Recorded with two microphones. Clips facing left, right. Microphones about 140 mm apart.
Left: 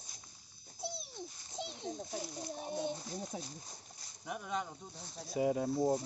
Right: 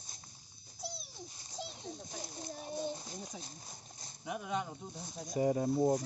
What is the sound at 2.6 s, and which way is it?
Speech, 20° left (ahead or behind).